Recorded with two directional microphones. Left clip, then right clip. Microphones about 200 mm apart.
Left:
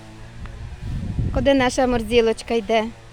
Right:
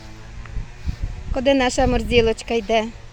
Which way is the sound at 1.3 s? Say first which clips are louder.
Even; centre (ahead or behind).